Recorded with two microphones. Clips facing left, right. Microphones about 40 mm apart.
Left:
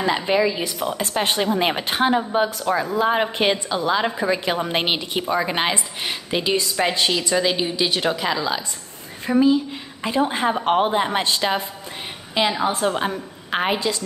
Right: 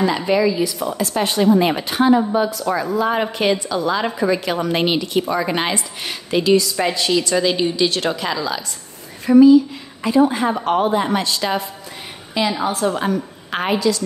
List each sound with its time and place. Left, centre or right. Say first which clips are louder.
0.0 s a woman's voice: right 2 dB; left
1.4 s speech: right 5 dB; left
2.6 s a woman's voice: right 1 dB; left
3.3 s speech: right 2 dB; left
4.0 s a woman's voice: right 2 dB; centre
5.3 s a woman's voice: right 1 dB; centre
6.5 s a woman's voice: right 5 dB; left
7.2 s a woman's voice: right 3 dB; centre
10.0 s a woman's voice: right 5 dB; left
13.0 s a woman's voice: right 4 dB; centre
13.7 s a woman's voice: right 6 dB; left